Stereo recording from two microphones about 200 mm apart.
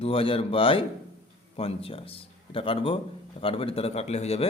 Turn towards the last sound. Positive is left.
turn(degrees=30)  # may be behind; listen again after turning